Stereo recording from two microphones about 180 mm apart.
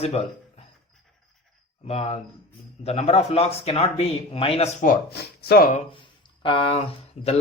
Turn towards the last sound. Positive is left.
turn(degrees=35)  # may be behind; listen again after turning